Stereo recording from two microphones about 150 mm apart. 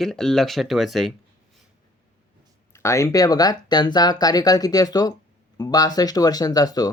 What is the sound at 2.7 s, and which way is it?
Speech, 20° left (ahead or behind).